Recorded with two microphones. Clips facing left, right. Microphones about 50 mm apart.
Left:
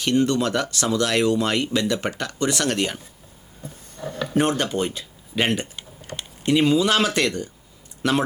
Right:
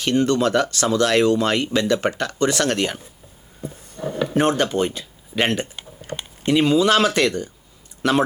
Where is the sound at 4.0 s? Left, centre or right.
Centre.